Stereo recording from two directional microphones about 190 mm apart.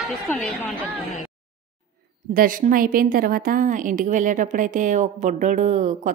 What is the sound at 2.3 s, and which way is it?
A woman's voice, 45° right (ahead or behind).